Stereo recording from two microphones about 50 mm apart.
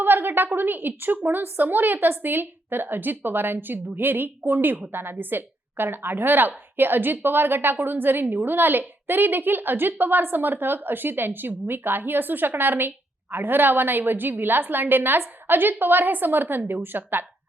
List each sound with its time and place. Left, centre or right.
0.0 s a woman's voice: right